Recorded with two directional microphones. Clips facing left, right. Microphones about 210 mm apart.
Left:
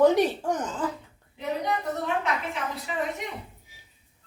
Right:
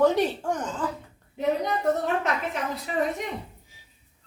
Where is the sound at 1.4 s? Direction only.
45° right (ahead or behind).